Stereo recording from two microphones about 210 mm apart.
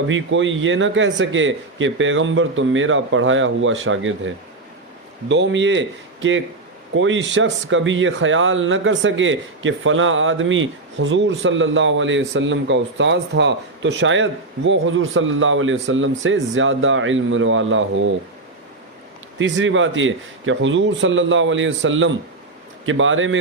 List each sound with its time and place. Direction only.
0.1 s speech: 65° right (ahead or behind)
5.3 s speech: 60° right (ahead or behind)
6.9 s speech: 65° right (ahead or behind)
19.4 s speech: 65° right (ahead or behind)